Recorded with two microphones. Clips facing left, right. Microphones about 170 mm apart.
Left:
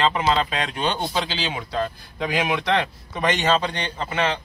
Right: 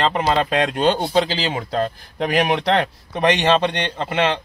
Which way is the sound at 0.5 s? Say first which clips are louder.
Right 7 dB; 55° right (ahead or behind).